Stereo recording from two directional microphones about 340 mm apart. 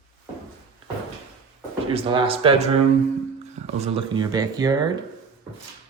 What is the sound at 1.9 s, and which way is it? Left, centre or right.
Speech, centre.